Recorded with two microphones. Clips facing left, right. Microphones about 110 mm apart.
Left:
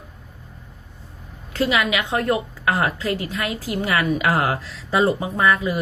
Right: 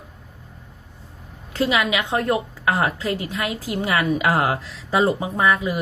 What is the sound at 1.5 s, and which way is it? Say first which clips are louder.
A woman's voice: even; 20° right (ahead or behind).